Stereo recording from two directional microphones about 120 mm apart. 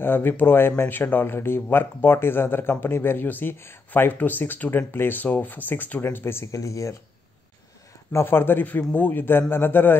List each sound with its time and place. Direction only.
0.0 s speech: 15° left (ahead or behind)
8.1 s speech: 20° left (ahead or behind)